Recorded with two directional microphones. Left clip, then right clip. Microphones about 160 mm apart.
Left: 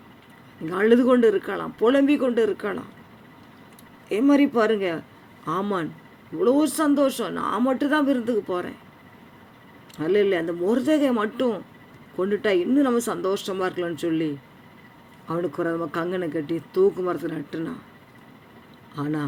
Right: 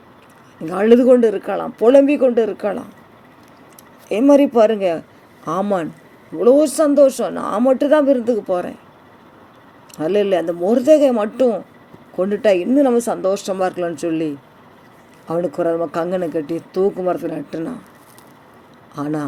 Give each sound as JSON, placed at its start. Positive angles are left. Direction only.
{"t": 0.6, "sound": "speech", "side_deg": -20}
{"t": 4.1, "sound": "speech", "side_deg": -25}
{"t": 9.9, "sound": "speech", "side_deg": -20}
{"t": 15.3, "sound": "speech", "side_deg": -20}
{"t": 18.9, "sound": "speech", "side_deg": -20}